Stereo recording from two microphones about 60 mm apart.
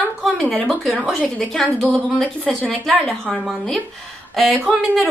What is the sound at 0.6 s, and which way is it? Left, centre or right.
Speech, centre.